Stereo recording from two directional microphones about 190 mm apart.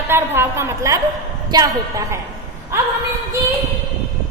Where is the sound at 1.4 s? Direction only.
20° right (ahead or behind).